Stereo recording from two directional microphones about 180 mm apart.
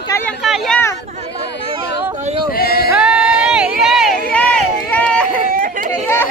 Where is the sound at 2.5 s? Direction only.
60° left (ahead or behind).